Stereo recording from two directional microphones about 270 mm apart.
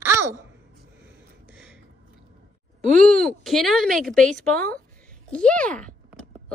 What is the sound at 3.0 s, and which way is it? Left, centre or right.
Speech, centre.